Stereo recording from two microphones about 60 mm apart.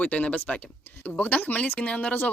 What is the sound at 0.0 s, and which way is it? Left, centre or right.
Speech, left.